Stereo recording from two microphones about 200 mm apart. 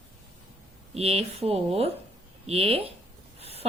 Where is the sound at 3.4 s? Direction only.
30° right (ahead or behind).